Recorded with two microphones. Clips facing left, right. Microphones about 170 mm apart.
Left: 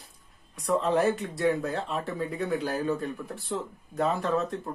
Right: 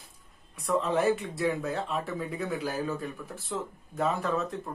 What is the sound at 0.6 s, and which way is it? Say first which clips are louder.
Speech: left 2 dB; centre (ahead or behind).